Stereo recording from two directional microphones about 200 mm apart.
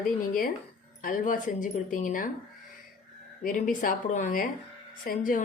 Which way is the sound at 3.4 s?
40° left (ahead or behind).